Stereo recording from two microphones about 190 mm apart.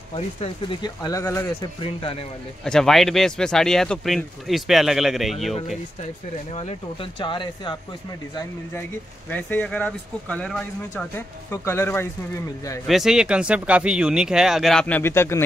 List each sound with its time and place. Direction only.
0.1 s speech: 25° left (ahead or behind)
1.8 s speech: 25° left (ahead or behind)
2.6 s speech: 5° left (ahead or behind)
6.5 s speech: 30° left (ahead or behind)
9.3 s speech: 10° left (ahead or behind)
12.8 s speech: centre (ahead or behind)